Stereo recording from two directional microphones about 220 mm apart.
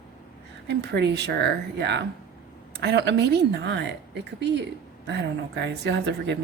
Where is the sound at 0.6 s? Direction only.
50° right (ahead or behind).